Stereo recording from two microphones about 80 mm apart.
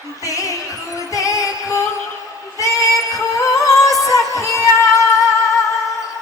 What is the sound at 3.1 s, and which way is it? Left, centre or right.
Music, left.